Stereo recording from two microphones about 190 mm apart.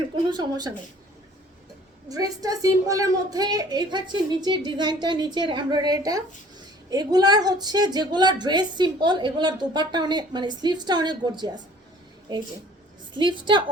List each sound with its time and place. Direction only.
0.3 s a woman's voice: 20° right (ahead or behind)
2.0 s a woman's voice: 20° right (ahead or behind)